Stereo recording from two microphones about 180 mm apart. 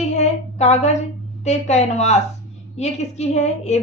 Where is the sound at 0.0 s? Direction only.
40° left (ahead or behind).